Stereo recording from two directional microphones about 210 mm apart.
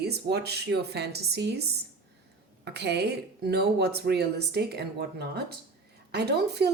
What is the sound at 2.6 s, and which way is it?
A woman's voice, 55° right (ahead or behind).